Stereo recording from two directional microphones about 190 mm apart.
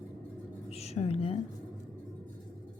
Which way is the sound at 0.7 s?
35° left (ahead or behind).